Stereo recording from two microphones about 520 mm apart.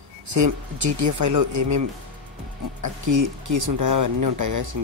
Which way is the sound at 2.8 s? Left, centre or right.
Right.